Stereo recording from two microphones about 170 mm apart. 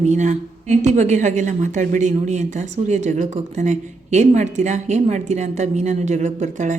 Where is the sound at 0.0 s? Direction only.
45° right (ahead or behind).